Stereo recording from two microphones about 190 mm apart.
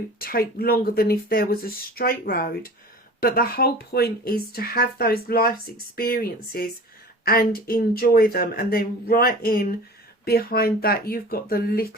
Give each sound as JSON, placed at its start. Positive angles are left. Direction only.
{"t": 0.2, "sound": "speech", "side_deg": 50}